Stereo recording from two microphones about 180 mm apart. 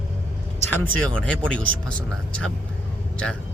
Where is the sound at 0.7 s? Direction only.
10° left (ahead or behind).